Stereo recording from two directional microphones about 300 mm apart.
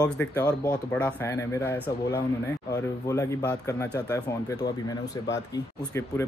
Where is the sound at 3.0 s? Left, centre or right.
Centre.